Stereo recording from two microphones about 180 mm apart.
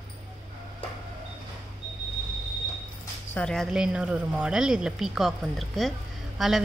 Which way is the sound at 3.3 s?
5° left (ahead or behind).